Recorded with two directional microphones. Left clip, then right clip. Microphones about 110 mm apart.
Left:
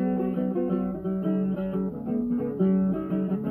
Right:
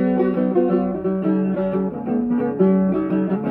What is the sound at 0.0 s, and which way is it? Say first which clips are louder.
Music: right 9 dB; 20° left (ahead or behind).